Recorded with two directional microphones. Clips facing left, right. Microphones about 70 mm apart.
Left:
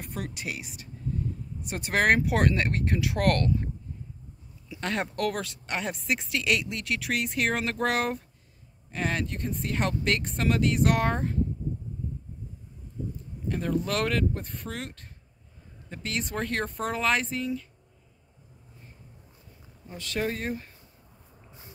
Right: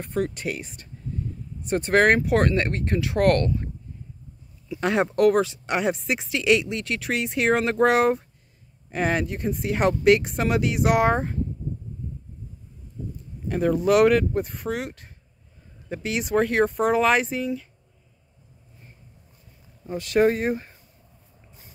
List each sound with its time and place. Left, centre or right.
0.0 s speech: centre
4.7 s speech: centre
13.5 s speech: centre
20.3 s speech: right